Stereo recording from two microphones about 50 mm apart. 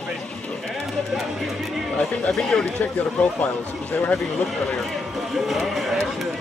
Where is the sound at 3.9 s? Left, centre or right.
Centre.